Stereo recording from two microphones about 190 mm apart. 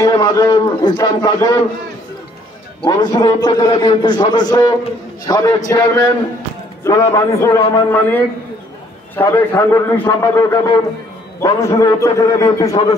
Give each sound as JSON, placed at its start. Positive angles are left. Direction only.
{"t": 0.0, "sound": "a man's voice", "side_deg": 20}
{"t": 2.8, "sound": "a man's voice", "side_deg": 20}